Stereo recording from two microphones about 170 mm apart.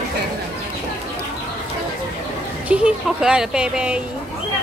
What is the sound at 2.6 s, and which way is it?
Speech, 5° right (ahead or behind).